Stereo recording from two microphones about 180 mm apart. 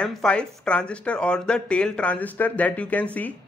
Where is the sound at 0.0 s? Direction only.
5° left (ahead or behind).